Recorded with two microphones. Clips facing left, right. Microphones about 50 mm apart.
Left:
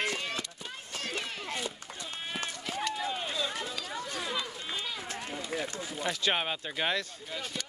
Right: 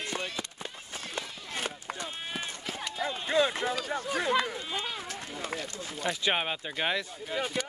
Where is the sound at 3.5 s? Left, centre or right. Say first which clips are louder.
Right 6 dB; right.